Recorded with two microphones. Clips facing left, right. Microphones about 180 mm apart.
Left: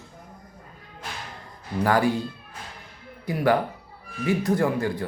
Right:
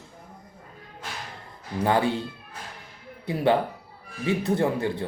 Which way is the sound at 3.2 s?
25° right (ahead or behind).